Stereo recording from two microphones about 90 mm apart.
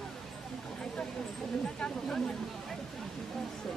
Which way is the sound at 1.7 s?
10° left (ahead or behind).